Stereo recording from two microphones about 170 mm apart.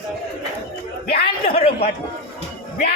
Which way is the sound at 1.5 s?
35° left (ahead or behind).